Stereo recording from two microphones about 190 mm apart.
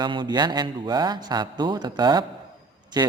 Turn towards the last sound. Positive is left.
turn(degrees=-20)  # may be behind; listen again after turning